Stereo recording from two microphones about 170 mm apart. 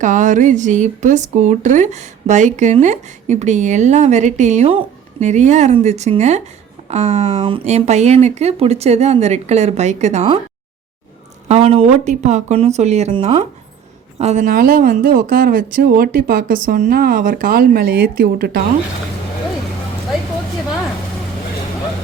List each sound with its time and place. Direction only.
0.0 s speech: 45° right (ahead or behind)
11.4 s speech: 35° right (ahead or behind)
14.4 s speech: 60° right (ahead or behind)